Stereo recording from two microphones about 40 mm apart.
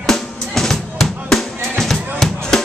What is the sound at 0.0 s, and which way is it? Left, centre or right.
Drum, centre.